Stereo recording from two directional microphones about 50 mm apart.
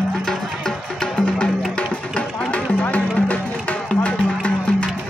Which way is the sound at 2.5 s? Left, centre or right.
Left.